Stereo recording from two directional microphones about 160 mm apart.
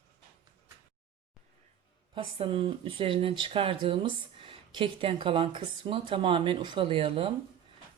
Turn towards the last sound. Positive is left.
turn(degrees=-35)  # may be behind; listen again after turning